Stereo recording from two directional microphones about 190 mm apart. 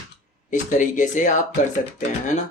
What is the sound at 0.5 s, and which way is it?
Speech, 40° left (ahead or behind).